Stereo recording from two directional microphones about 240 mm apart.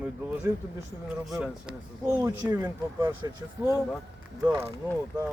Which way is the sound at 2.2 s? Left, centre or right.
Centre.